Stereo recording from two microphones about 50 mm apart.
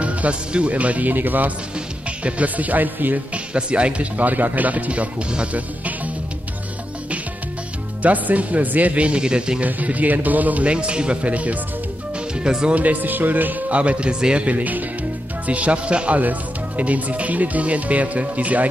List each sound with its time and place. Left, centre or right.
0.0 s speech: right
3.5 s speech: right
8.0 s speech: right
9.6 s speech: right
12.4 s speech: centre
12.7 s speech: right